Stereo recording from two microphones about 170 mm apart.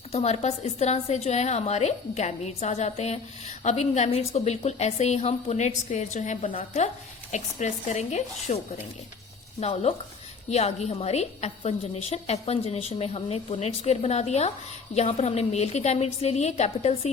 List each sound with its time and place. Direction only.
0.1 s a woman's voice: 40° left (ahead or behind)
9.6 s a woman's voice: 40° left (ahead or behind)